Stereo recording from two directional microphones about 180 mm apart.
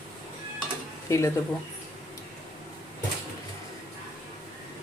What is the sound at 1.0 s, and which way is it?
Speech, 15° left (ahead or behind).